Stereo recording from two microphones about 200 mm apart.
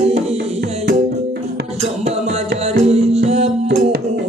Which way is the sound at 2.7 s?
30° right (ahead or behind).